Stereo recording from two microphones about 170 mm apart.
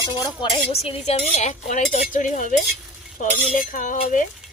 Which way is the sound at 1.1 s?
40° left (ahead or behind).